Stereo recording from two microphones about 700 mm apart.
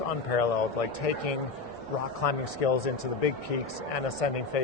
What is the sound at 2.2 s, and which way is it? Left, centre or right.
Speech, left.